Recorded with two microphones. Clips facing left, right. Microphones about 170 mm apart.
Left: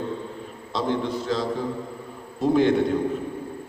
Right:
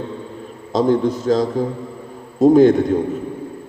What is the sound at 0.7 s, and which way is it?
A man's voice, 45° right (ahead or behind).